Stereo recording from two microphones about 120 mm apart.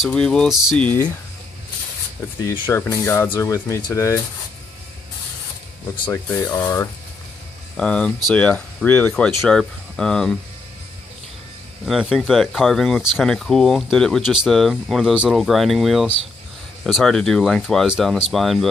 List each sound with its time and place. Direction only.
0.0 s speech: 5° left (ahead or behind)
0.5 s speech: 5° right (ahead or behind)
0.7 s speech: 15° left (ahead or behind)
2.7 s speech: 20° left (ahead or behind)
6.1 s speech: 20° left (ahead or behind)
6.5 s speech: 30° left (ahead or behind)
7.7 s speech: 10° left (ahead or behind)
11.8 s speech: 5° right (ahead or behind)